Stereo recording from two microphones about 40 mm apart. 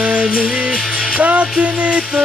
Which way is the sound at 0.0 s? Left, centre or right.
Right.